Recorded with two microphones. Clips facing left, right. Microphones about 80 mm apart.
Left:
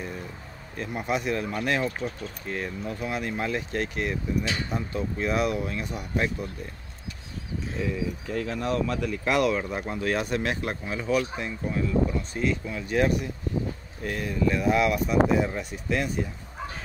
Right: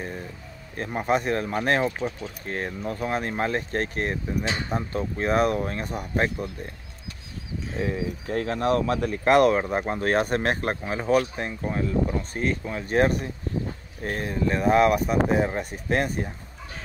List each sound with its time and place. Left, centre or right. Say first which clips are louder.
0.7 s speech: right 4 dB; right
8.3 s speech: right 6 dB; right